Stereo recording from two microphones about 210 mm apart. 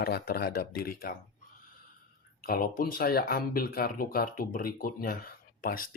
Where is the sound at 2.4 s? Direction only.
45° left (ahead or behind).